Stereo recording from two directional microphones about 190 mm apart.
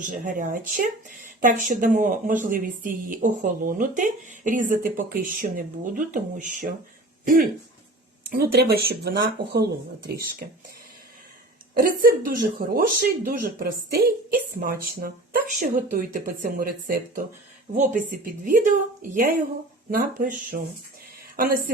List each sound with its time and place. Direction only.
0.0 s a woman's voice: 45° right (ahead or behind)
8.2 s a sound: 55° right (ahead or behind)
8.5 s speech: 55° right (ahead or behind)
11.7 s a woman's voice: 50° right (ahead or behind)